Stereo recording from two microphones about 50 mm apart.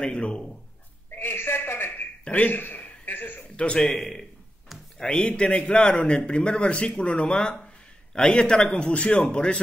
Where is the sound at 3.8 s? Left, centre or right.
Centre.